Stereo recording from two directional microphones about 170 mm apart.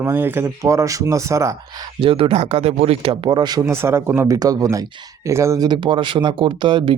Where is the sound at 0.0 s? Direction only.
15° right (ahead or behind).